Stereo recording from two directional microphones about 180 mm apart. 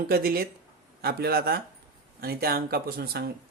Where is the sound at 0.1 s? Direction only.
55° right (ahead or behind).